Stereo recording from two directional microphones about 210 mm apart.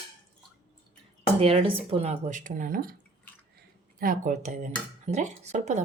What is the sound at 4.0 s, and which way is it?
Speech, 40° right (ahead or behind).